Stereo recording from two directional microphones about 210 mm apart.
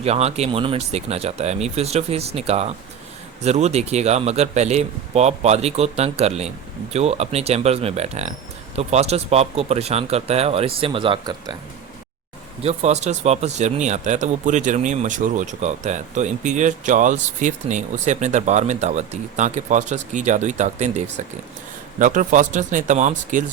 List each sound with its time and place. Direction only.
0.0 s speech: 30° right (ahead or behind)
12.6 s speech: 30° right (ahead or behind)